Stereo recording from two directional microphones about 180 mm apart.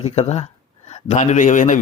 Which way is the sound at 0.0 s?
35° left (ahead or behind).